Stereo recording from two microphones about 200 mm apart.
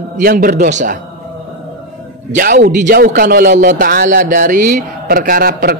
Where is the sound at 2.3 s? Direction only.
45° right (ahead or behind).